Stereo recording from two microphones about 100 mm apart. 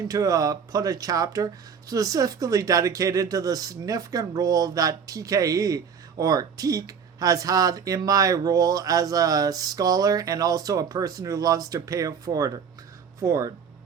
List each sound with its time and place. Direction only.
0.1 s speech: 35° right (ahead or behind)